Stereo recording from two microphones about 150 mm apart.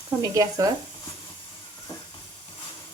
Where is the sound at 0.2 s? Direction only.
20° right (ahead or behind).